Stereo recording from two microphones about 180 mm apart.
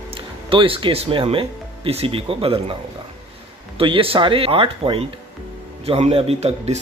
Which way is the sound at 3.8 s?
30° right (ahead or behind).